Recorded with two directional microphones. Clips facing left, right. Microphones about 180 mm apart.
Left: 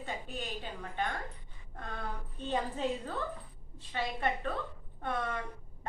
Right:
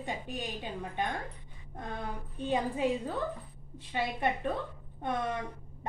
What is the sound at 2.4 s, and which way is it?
A woman's voice, 10° right (ahead or behind).